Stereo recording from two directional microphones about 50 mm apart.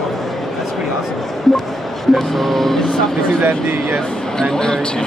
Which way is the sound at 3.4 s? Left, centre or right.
Right.